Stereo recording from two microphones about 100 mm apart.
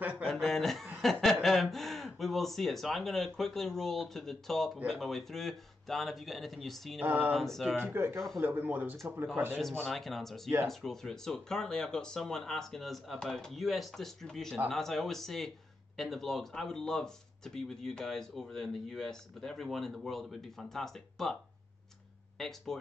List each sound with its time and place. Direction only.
0.2 s a man's voice: 5° left (ahead or behind)
7.0 s speech: 15° right (ahead or behind)
7.3 s speech: centre (ahead or behind)
7.7 s speech: 20° right (ahead or behind)
9.8 s speech: centre (ahead or behind)
22.4 s speech: 5° left (ahead or behind)